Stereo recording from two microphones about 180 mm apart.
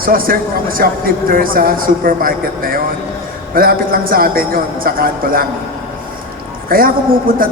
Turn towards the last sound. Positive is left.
turn(degrees=-55)  # may be behind; listen again after turning